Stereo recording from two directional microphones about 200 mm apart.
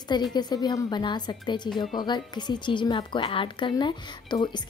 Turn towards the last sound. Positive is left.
turn(degrees=20)  # may be behind; listen again after turning